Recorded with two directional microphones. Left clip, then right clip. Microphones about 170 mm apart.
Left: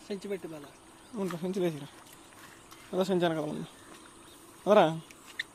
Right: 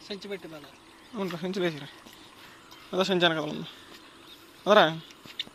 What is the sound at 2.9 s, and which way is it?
Speech, 5° left (ahead or behind).